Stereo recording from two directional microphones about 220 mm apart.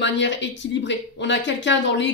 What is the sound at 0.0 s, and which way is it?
Speech, 55° left (ahead or behind).